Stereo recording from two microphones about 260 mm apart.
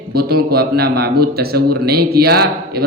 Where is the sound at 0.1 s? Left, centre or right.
Right.